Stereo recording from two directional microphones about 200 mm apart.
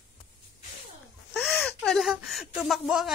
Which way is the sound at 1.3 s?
Centre (ahead or behind).